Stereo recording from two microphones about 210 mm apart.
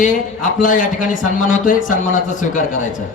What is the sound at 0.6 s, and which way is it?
Speech, 40° left (ahead or behind).